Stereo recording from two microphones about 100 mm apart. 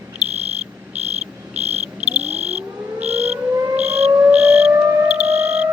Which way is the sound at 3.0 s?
90° right.